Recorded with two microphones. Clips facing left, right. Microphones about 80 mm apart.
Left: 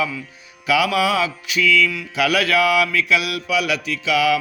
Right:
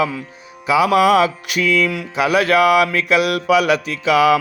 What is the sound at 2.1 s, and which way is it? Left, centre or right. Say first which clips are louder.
Mantra: right 4 dB; right.